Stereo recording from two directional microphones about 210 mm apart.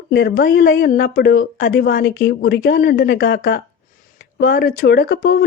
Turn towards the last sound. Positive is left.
turn(degrees=45)  # may be behind; listen again after turning